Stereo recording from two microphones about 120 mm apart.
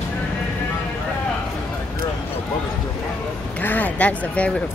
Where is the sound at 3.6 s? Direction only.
15° left (ahead or behind).